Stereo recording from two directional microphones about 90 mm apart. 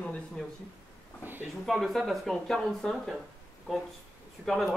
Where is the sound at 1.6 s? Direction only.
Centre (ahead or behind).